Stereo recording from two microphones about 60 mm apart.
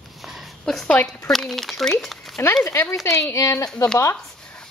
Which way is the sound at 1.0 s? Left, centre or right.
Centre.